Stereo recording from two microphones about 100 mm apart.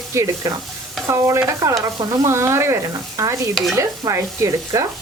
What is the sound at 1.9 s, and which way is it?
Speech, 30° right (ahead or behind).